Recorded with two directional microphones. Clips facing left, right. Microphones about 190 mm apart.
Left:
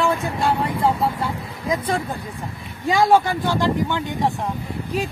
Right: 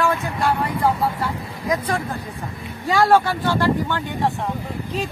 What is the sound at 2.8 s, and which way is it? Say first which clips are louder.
Speech: even; 15° left (ahead or behind).